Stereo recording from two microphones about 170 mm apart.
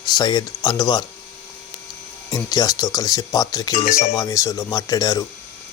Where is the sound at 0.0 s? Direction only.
25° left (ahead or behind).